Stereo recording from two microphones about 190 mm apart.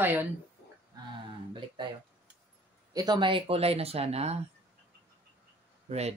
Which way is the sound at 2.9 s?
20° right (ahead or behind).